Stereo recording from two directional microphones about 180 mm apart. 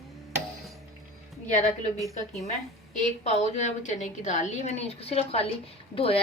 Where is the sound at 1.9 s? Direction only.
Centre (ahead or behind).